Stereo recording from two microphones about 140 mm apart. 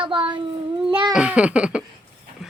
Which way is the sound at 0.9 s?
35° right (ahead or behind).